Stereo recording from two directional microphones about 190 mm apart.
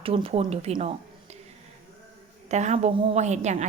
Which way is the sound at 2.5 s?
35° right (ahead or behind).